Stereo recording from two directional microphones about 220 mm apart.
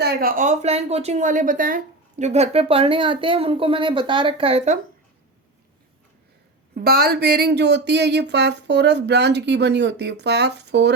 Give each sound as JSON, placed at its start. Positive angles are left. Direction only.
{"t": 0.0, "sound": "speech", "side_deg": -40}
{"t": 6.7, "sound": "speech", "side_deg": -45}